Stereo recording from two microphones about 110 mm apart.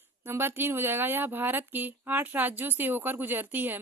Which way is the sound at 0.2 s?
20° right (ahead or behind).